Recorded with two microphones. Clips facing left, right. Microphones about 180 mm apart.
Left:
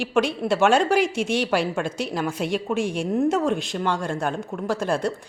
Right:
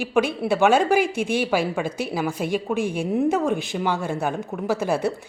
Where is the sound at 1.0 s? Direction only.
55° right (ahead or behind).